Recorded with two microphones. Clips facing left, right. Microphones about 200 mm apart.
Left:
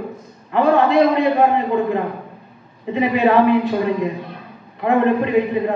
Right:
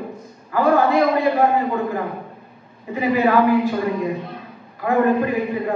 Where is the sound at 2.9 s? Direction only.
20° left (ahead or behind).